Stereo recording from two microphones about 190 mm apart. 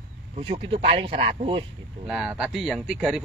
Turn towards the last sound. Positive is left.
turn(degrees=-5)  # may be behind; listen again after turning